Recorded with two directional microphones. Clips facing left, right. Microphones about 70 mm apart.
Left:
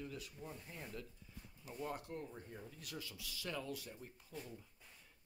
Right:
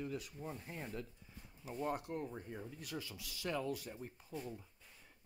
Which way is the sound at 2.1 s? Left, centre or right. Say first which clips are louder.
Right 5 dB; right.